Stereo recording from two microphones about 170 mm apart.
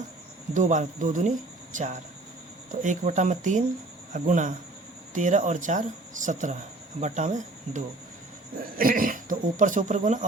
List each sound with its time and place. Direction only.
0.5 s speech: 45° right (ahead or behind)
8.8 s speech: 55° right (ahead or behind)